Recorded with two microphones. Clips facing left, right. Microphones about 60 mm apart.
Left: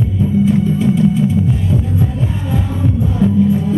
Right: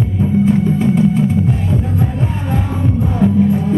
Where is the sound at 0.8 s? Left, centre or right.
Right.